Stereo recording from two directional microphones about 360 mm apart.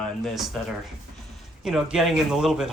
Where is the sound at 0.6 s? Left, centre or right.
Centre.